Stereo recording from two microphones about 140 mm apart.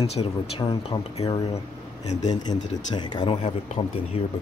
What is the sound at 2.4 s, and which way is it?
Speech, 35° left (ahead or behind).